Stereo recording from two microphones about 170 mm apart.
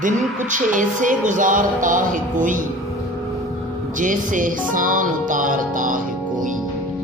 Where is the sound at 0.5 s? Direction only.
50° right (ahead or behind).